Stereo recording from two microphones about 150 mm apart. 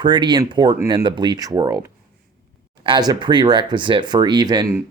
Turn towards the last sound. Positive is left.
turn(degrees=-30)  # may be behind; listen again after turning